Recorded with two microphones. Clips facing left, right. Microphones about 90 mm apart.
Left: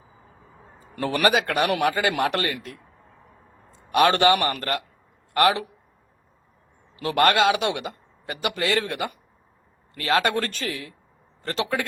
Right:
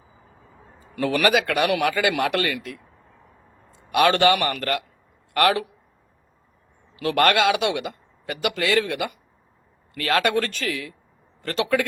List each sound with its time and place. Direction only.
0.9 s a man's voice: 30° left (ahead or behind)
3.9 s a man's voice: 30° left (ahead or behind)
6.9 s a man's voice: 30° left (ahead or behind)